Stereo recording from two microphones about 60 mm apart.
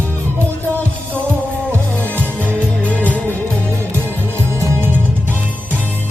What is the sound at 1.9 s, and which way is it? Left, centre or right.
Music, left.